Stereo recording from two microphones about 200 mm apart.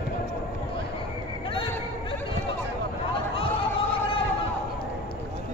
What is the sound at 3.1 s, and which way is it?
Chatter, 25° left (ahead or behind).